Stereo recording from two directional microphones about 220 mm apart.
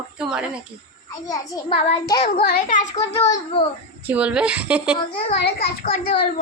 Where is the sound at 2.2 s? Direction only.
40° left (ahead or behind).